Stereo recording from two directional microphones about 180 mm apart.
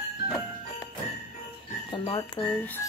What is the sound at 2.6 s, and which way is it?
Speech, 10° left (ahead or behind).